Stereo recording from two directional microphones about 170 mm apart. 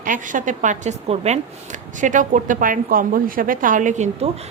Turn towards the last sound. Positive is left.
turn(degrees=-45)  # may be behind; listen again after turning